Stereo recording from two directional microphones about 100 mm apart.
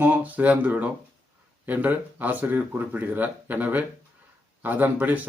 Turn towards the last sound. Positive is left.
turn(degrees=-15)  # may be behind; listen again after turning